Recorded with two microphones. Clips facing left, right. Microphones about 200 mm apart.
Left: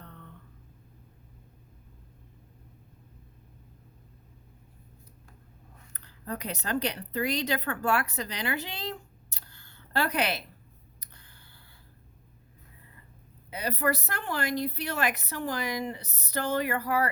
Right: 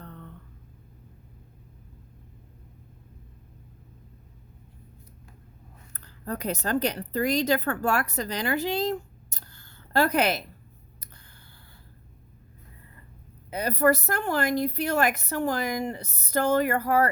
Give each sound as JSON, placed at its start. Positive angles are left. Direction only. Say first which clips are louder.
{"t": 5.9, "sound": "speech", "louder": "right 3 dB", "side_deg": -45}
{"t": 13.5, "sound": "a woman's voice", "louder": "right 7 dB", "side_deg": -45}